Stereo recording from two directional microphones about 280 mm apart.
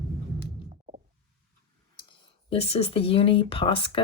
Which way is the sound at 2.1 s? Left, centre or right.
Centre.